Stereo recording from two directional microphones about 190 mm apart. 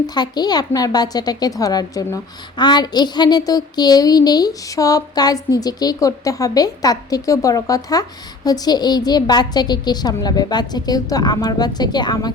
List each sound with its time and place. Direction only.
0.1 s a woman's voice: 20° left (ahead or behind)